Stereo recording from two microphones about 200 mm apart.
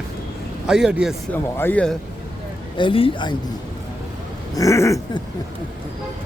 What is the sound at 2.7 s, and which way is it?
Speech, 25° left (ahead or behind).